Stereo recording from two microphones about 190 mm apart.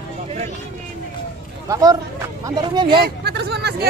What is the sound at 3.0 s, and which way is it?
Speech, 60° right (ahead or behind).